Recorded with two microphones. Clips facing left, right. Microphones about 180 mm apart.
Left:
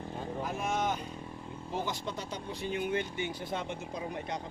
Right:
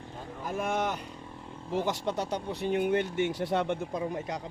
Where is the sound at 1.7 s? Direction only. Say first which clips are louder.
Right 6 dB; 70° right (ahead or behind).